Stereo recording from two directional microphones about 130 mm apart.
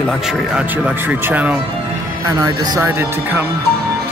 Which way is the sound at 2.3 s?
30° right (ahead or behind).